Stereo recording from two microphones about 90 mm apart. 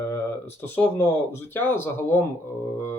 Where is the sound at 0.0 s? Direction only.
25° left (ahead or behind).